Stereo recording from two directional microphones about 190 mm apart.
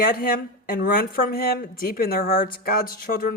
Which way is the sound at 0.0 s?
50° left (ahead or behind).